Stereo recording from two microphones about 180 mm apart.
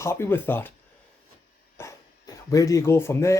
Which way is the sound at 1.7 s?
15° left (ahead or behind).